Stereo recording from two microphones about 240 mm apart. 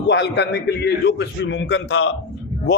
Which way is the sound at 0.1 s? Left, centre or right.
Left.